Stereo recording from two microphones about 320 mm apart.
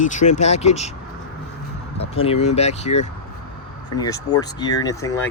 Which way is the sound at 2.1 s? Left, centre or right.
Centre.